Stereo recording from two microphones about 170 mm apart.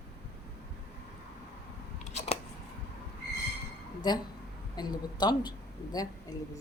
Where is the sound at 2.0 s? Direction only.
40° left (ahead or behind).